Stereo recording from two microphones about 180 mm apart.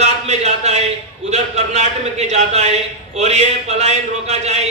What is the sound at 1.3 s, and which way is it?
A man's voice, 40° right (ahead or behind).